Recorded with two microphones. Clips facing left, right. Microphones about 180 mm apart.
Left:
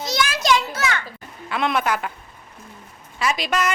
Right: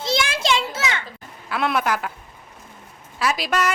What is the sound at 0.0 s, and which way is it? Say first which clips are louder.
Children playing: even; 25° right (ahead or behind).